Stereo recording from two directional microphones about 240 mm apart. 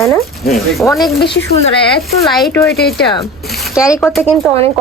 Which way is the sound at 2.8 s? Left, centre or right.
Left.